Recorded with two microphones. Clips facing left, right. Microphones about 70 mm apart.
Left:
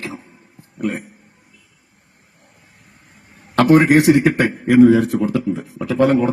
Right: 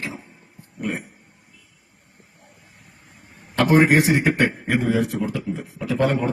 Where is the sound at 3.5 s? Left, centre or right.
Left.